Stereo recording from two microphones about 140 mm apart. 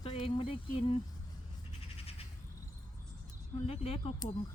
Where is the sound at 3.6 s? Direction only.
45° left (ahead or behind).